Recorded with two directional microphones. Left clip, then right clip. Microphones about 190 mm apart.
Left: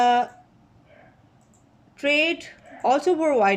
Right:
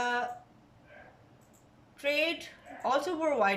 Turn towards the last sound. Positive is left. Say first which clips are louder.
# left 9 dB
turn(degrees=40)  # may be behind; listen again after turning